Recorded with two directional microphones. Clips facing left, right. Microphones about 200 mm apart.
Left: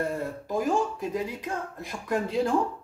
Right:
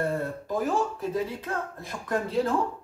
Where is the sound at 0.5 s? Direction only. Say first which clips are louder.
Left 1 dB; 15° left (ahead or behind).